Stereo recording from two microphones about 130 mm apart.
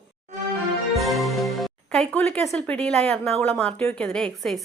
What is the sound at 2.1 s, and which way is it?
Speech, 15° left (ahead or behind).